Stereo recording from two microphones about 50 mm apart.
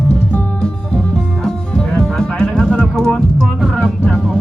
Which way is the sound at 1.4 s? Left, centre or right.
Centre.